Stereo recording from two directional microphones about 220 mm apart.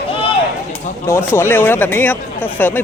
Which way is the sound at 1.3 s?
10° left (ahead or behind).